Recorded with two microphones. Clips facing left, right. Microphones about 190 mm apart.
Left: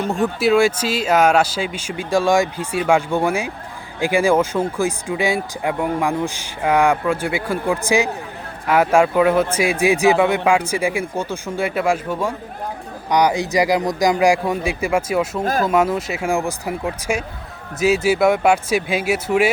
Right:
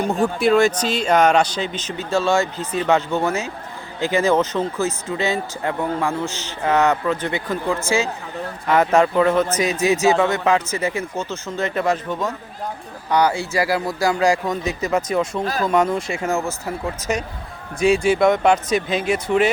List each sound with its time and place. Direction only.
0.1 s speech: centre (ahead or behind)